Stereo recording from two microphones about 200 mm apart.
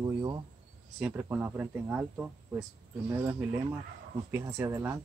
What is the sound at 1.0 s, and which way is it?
Speech, 10° right (ahead or behind).